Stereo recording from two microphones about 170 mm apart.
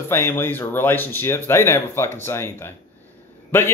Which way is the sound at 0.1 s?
15° left (ahead or behind).